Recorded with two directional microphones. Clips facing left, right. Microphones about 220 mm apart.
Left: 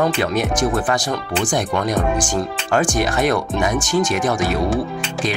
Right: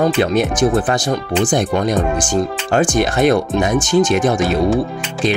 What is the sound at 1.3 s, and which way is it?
Speech, 20° right (ahead or behind).